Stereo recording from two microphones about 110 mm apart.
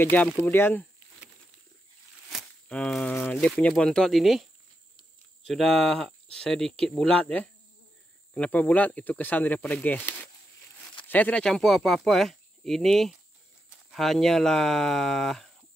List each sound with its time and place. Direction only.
0.0 s speech: 15° left (ahead or behind)
2.2 s a sound: 10° left (ahead or behind)
3.3 s speech: 10° left (ahead or behind)